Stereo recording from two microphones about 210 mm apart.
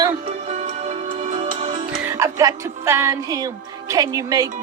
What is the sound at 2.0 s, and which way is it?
Speech, 15° right (ahead or behind).